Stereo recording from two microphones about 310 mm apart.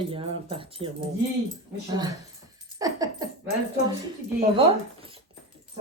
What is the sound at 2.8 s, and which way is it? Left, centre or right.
Speech, centre.